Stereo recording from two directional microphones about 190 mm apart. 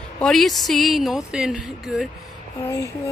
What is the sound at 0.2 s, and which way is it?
A child's voice, centre (ahead or behind).